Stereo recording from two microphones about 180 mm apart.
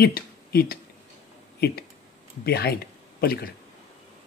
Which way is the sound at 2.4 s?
60° left (ahead or behind).